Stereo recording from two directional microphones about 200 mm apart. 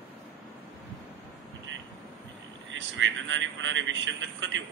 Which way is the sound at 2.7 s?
70° right (ahead or behind).